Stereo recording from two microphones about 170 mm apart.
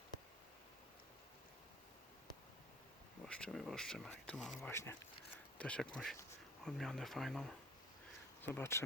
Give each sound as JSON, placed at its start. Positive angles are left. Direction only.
{"t": 3.2, "sound": "speech", "side_deg": 5}
{"t": 4.7, "sound": "speech", "side_deg": 15}
{"t": 8.4, "sound": "speech", "side_deg": 15}